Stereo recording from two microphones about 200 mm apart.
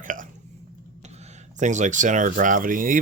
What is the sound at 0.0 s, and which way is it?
Hiccup, 40° right (ahead or behind).